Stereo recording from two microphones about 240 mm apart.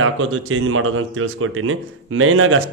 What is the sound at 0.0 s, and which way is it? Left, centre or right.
Speech, right.